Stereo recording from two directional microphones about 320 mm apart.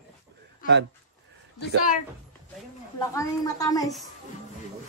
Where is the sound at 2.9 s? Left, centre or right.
Centre.